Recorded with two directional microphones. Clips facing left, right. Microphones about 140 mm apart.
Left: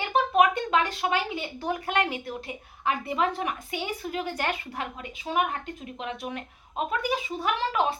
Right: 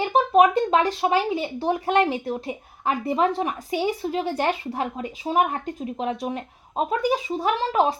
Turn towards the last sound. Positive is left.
turn(degrees=-35)  # may be behind; listen again after turning